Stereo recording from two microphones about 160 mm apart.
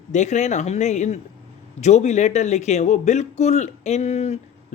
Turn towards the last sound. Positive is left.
turn(degrees=40)  # may be behind; listen again after turning